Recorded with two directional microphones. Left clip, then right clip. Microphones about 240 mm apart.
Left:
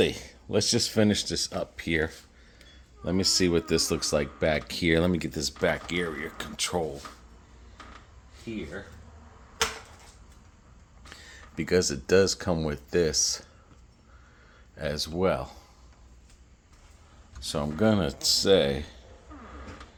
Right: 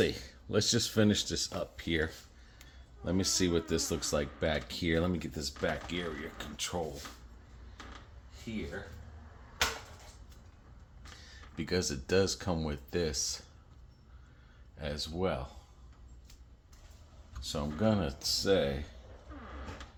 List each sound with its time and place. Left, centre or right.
0.0 s speech: left
11.3 s speech: left
14.8 s speech: left
17.4 s speech: left